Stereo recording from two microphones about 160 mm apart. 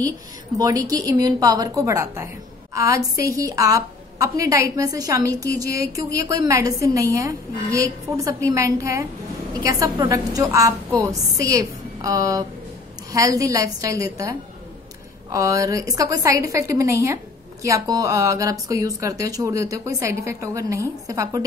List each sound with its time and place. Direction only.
0.6 s a woman's voice: 20° right (ahead or behind)